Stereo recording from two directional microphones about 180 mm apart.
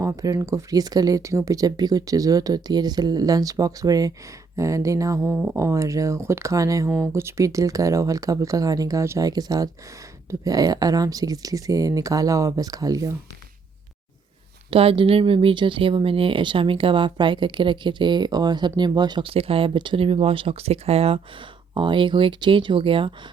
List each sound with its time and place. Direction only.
0.0 s speech: 20° right (ahead or behind)
14.7 s speech: 30° right (ahead or behind)